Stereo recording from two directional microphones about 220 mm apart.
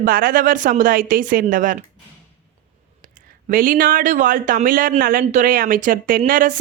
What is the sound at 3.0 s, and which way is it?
Speech, 40° right (ahead or behind).